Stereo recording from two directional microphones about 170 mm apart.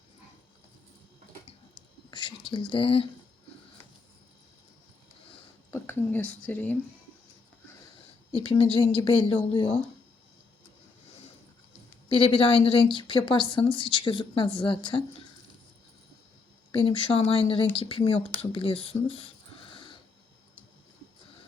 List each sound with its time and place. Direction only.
2.0 s speech: 25° left (ahead or behind)
5.7 s speech: 15° left (ahead or behind)
8.3 s a woman's voice: 35° left (ahead or behind)
12.0 s a woman's voice: 30° left (ahead or behind)
16.7 s speech: 30° left (ahead or behind)